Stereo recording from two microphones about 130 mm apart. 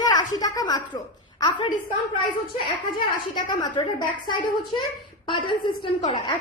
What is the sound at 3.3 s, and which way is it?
Speech, 35° left (ahead or behind).